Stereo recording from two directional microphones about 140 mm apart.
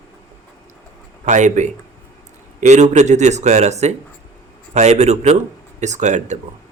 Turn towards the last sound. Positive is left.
turn(degrees=-60)  # may be behind; listen again after turning